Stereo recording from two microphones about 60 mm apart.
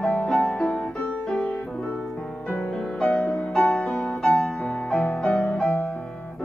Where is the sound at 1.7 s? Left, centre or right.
Centre.